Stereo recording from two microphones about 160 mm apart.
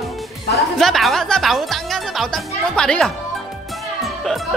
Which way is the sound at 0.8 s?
Centre (ahead or behind).